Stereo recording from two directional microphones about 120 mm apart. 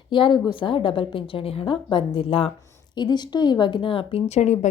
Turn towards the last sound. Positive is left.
turn(degrees=70)  # may be behind; listen again after turning